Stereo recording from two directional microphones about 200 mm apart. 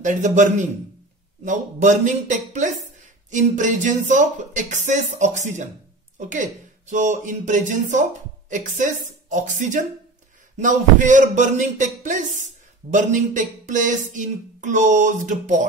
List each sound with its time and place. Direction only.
0.0 s speech: 40° right (ahead or behind)